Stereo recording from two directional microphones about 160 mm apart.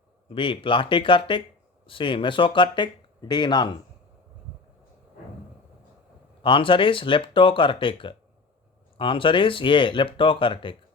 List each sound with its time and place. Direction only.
0.3 s speech: 35° left (ahead or behind)
6.4 s speech: 30° left (ahead or behind)